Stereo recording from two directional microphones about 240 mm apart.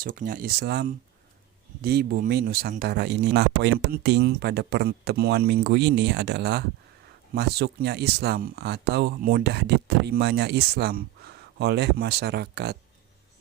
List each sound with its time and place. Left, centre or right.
0.0 s speech: right